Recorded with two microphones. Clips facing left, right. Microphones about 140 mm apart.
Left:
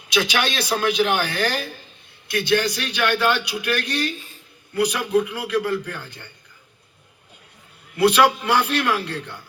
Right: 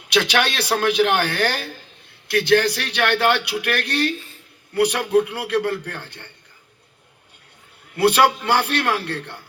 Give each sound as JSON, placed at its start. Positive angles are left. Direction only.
{"t": 0.1, "sound": "a man's voice", "side_deg": -60}
{"t": 7.9, "sound": "a man's voice", "side_deg": -60}